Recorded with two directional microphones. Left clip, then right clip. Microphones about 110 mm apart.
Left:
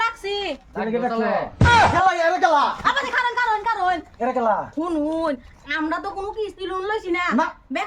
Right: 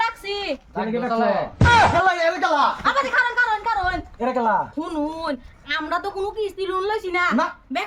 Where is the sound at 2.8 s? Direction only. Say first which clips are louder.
Right 1 dB; 10° left (ahead or behind); by 7.8 s 10° right (ahead or behind).